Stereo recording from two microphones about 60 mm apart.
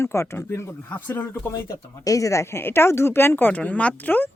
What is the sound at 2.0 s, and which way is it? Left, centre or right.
Speech, left.